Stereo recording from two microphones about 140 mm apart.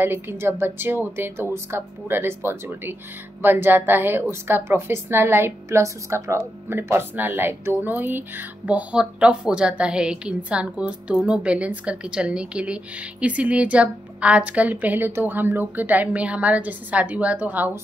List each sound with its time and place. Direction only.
0.0 s a woman's voice: 15° right (ahead or behind)